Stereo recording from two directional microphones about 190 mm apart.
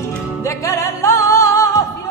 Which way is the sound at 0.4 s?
15° left (ahead or behind).